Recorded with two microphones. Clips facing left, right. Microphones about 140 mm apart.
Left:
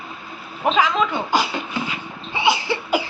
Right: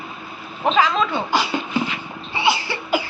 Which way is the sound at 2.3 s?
15° left (ahead or behind).